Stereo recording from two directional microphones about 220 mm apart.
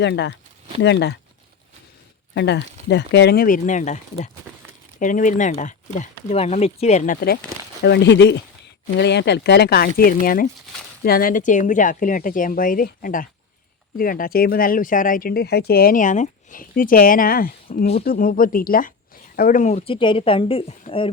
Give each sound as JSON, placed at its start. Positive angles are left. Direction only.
{"t": 0.0, "sound": "speech", "side_deg": 50}
{"t": 2.3, "sound": "speech", "side_deg": 50}
{"t": 7.8, "sound": "speech", "side_deg": 50}